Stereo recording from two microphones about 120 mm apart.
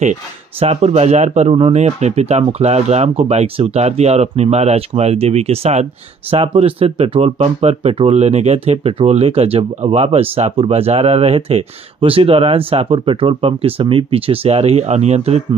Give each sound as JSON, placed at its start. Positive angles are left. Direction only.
{"t": 0.6, "sound": "speech", "side_deg": -55}